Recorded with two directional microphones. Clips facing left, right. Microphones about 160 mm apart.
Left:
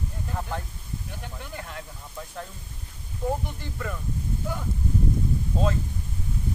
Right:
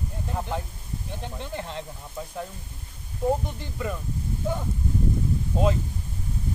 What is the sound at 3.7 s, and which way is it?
Speech, 20° right (ahead or behind).